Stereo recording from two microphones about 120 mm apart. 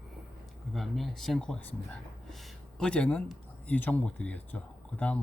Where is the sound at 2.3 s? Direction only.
Centre (ahead or behind).